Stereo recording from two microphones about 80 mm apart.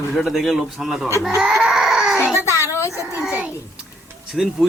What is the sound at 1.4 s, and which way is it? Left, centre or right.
Baby cry, centre.